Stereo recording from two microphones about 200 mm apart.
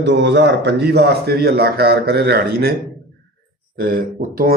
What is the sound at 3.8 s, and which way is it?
Speech, 45° right (ahead or behind).